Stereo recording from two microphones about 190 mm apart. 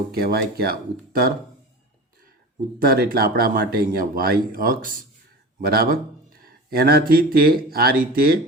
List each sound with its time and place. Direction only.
0.1 s speech: 55° right (ahead or behind)
2.7 s speech: 50° right (ahead or behind)
5.5 s a sound: 50° right (ahead or behind)
7.1 s speech: 50° right (ahead or behind)